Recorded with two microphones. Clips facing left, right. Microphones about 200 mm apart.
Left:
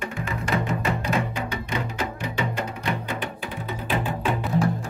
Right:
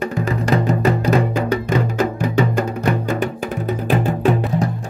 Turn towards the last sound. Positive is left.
turn(degrees=-45)  # may be behind; listen again after turning